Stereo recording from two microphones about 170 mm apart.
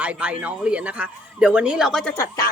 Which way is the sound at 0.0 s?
10° right (ahead or behind).